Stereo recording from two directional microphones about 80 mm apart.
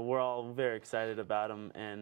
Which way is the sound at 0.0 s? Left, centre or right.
Right.